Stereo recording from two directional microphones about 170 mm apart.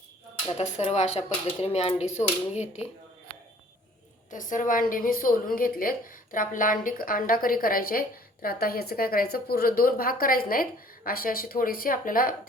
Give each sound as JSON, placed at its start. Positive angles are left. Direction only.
{"t": 0.4, "sound": "speech", "side_deg": 35}
{"t": 4.3, "sound": "a woman's voice", "side_deg": 50}